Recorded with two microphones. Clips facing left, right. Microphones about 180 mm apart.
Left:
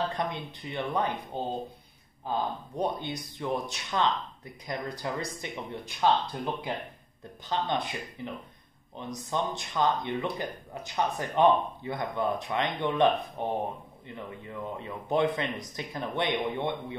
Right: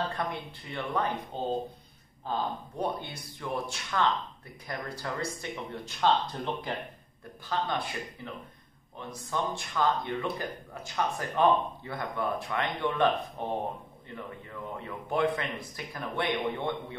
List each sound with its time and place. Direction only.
0.1 s speech: 20° left (ahead or behind)
2.8 s speech: 20° left (ahead or behind)